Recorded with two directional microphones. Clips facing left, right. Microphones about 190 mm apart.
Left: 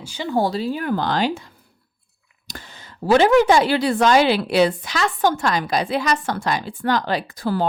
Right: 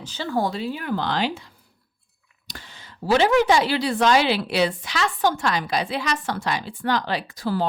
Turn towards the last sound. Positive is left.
turn(degrees=50)  # may be behind; listen again after turning